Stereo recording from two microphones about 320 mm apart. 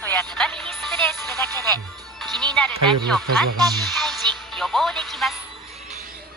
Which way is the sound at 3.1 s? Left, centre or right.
Centre.